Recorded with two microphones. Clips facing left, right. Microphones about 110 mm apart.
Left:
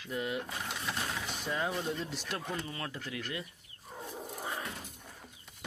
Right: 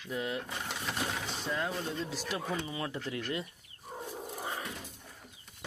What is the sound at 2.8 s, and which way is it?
Speech, 20° right (ahead or behind).